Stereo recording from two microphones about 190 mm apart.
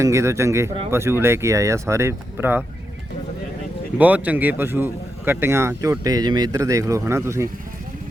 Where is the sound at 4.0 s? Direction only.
10° right (ahead or behind).